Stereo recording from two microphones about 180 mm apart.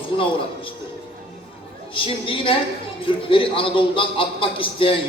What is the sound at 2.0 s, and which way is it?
A man's voice, 30° left (ahead or behind).